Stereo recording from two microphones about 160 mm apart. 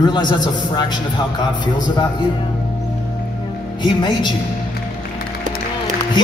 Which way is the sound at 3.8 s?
30° left (ahead or behind).